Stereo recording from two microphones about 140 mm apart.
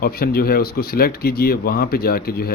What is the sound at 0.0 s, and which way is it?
Speech, 90° left.